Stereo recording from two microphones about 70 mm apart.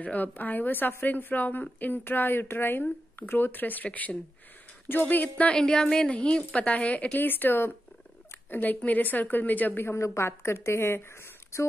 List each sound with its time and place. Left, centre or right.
0.0 s a woman's voice: left
5.4 s a woman's voice: centre
9.8 s speech: left